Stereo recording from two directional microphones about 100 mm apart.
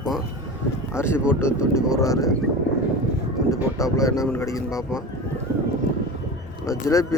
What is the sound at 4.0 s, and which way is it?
Speech, 30° left (ahead or behind).